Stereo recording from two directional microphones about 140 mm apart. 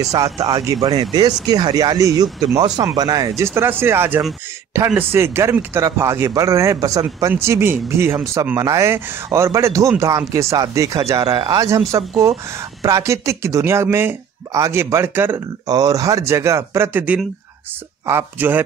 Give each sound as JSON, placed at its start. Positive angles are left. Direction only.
{"t": 0.1, "sound": "speech", "side_deg": -25}
{"t": 15.6, "sound": "speech", "side_deg": -25}